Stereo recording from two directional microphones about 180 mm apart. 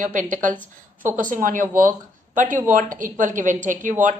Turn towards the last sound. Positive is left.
turn(degrees=-45)  # may be behind; listen again after turning